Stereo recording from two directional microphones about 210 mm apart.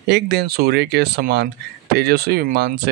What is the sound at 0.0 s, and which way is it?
Speech, 55° right (ahead or behind).